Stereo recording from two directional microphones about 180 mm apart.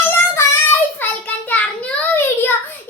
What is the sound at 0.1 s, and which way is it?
Child singing, 10° left (ahead or behind).